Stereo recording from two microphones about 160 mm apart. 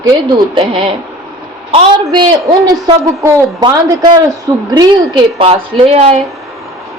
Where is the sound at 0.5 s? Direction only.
35° right (ahead or behind).